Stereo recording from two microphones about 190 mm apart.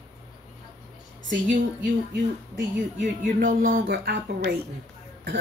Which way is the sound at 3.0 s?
45° right (ahead or behind).